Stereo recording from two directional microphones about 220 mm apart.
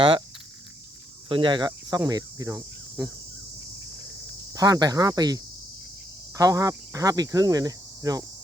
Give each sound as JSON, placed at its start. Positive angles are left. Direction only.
{"t": 1.3, "sound": "speech", "side_deg": -20}
{"t": 4.5, "sound": "speech", "side_deg": -15}